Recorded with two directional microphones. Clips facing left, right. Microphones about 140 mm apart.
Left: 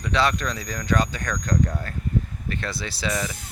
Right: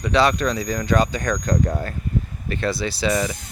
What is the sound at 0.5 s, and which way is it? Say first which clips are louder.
Speech: right 4 dB; 20° right (ahead or behind).